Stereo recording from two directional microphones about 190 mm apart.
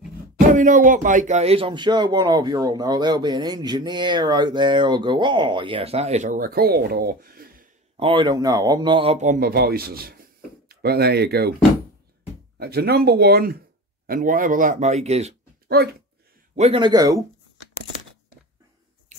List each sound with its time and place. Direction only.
0.5 s speech: 45° right (ahead or behind)
8.0 s a man's voice: 25° right (ahead or behind); by 11.5 s 55° right (ahead or behind)
12.5 s speech: 55° right (ahead or behind); by 15.3 s 35° right (ahead or behind)
15.7 s speech: 55° right (ahead or behind)
16.5 s speech: 30° right (ahead or behind)